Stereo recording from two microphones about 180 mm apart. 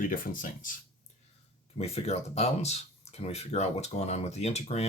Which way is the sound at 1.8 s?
35° left (ahead or behind).